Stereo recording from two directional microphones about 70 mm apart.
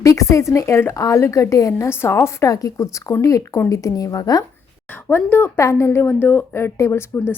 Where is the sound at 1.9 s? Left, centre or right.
Left.